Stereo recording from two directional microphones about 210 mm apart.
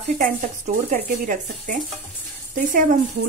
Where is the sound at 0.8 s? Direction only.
40° right (ahead or behind).